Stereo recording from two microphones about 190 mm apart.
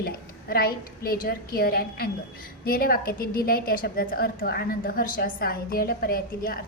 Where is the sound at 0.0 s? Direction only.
55° left (ahead or behind).